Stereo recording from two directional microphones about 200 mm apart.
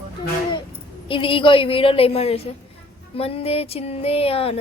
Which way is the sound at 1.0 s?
25° left (ahead or behind).